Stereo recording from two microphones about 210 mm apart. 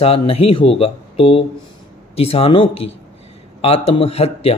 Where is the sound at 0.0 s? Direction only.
25° left (ahead or behind).